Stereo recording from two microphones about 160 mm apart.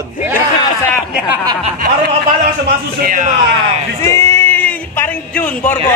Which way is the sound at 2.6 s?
60° right (ahead or behind).